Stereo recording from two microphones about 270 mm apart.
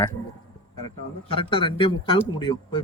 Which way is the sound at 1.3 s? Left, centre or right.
Centre.